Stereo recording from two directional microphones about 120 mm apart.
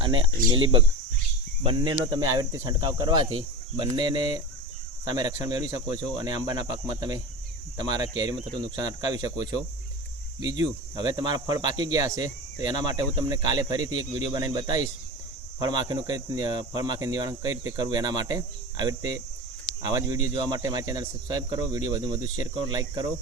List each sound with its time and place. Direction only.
0.0 s speech: 45° right (ahead or behind)